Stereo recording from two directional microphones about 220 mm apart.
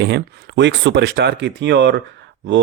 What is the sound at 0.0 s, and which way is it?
Speech, 50° right (ahead or behind).